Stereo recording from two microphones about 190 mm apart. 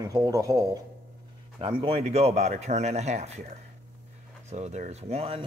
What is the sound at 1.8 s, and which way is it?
Speech, 30° right (ahead or behind).